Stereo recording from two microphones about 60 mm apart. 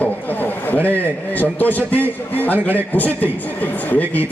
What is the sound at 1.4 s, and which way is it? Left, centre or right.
A man's voice, left.